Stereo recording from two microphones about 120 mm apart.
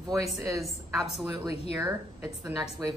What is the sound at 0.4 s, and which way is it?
A woman's voice, 25° right (ahead or behind).